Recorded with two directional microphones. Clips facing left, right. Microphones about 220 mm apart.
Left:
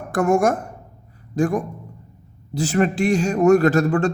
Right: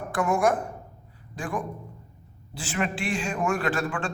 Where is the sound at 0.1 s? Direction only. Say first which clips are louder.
Left 6 dB; 45° left (ahead or behind).